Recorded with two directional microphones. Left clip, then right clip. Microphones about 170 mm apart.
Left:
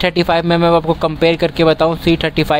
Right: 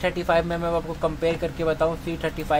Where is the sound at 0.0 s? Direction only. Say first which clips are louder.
Left 8 dB; 40° left (ahead or behind).